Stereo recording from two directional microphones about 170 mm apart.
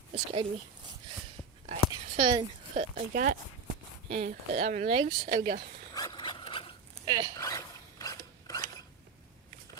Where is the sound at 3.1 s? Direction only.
55° right (ahead or behind).